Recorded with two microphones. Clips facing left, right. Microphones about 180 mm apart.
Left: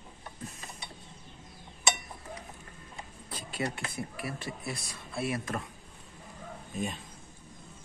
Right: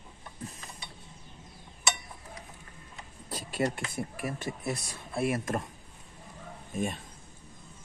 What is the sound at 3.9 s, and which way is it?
Speech, 45° right (ahead or behind).